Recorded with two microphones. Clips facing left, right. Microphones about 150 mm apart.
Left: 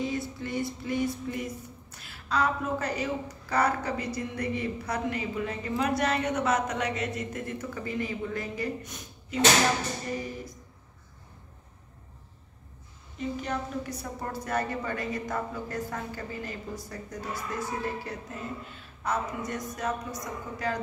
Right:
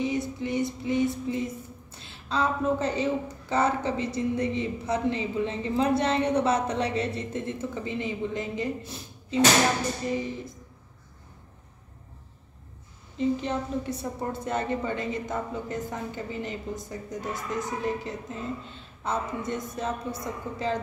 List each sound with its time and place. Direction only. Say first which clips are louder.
0.0 s music: right 4 dB; 20° right (ahead or behind)
13.2 s music: right 5 dB; 25° right (ahead or behind)